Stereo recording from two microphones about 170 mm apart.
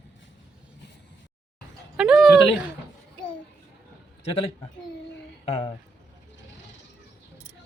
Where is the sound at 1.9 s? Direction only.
5° right (ahead or behind).